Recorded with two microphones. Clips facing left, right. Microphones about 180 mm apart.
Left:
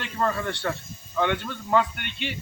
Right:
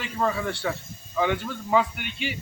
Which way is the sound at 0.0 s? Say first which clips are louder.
Even; 5° right (ahead or behind).